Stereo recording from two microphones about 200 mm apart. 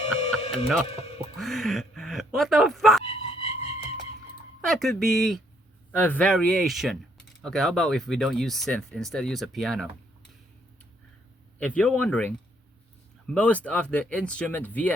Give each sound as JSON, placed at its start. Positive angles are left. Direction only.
{"t": 0.0, "sound": "music", "side_deg": 30}
{"t": 1.4, "sound": "speech", "side_deg": 0}
{"t": 3.0, "sound": "music", "side_deg": 30}
{"t": 4.6, "sound": "speech", "side_deg": 0}
{"t": 11.6, "sound": "speech", "side_deg": 5}